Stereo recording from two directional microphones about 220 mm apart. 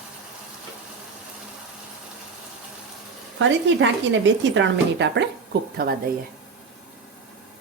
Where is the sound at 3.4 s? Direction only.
55° right (ahead or behind).